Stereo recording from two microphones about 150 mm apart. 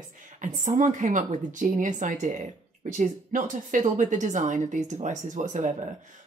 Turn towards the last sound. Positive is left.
turn(degrees=-55)  # may be behind; listen again after turning